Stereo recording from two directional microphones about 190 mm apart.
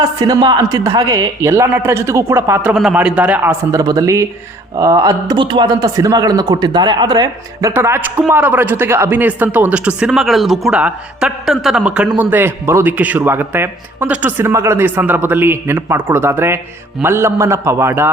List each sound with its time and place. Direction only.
0.0 s a man's voice: 20° right (ahead or behind)